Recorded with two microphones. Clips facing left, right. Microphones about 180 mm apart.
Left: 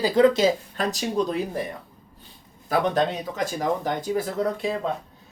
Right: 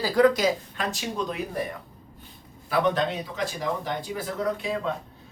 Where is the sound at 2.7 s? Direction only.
40° left (ahead or behind).